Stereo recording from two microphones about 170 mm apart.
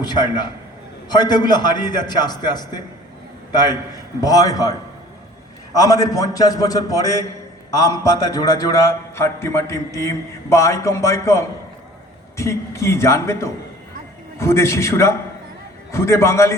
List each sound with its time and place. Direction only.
0.0 s a man's voice: 25° left (ahead or behind)